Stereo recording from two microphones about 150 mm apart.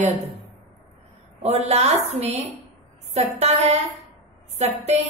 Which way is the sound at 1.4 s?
45° right (ahead or behind).